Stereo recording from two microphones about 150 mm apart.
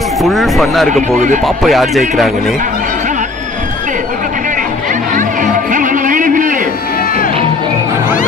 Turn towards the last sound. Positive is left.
turn(degrees=-60)  # may be behind; listen again after turning